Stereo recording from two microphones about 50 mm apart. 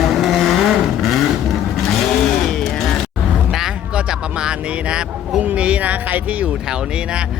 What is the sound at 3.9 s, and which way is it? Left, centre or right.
Music, centre.